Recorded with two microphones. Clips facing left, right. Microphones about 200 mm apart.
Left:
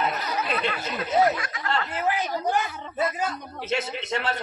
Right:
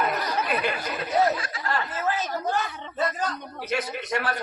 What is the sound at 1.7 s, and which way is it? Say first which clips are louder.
Speech: left 1 dB; 15° left (ahead or behind).